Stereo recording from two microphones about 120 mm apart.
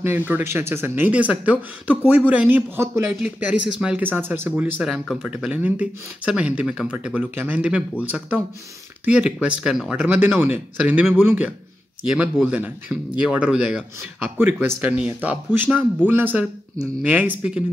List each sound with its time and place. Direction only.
0.3 s speech: 20° right (ahead or behind)
4.8 s speech: 5° right (ahead or behind)
9.0 s speech: 10° right (ahead or behind)